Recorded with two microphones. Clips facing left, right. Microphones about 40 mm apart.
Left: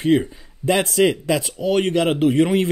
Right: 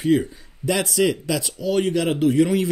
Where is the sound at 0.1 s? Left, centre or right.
Left.